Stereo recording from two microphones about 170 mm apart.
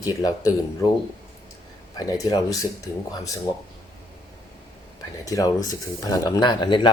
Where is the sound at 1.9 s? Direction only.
20° left (ahead or behind).